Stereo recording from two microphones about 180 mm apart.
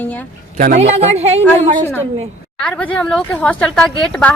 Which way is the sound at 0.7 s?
40° right (ahead or behind).